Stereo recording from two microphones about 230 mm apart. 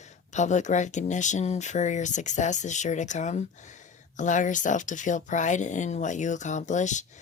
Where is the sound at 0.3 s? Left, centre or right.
Left.